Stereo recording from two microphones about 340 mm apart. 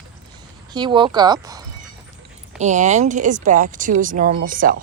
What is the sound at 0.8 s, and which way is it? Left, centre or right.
A woman's voice, centre.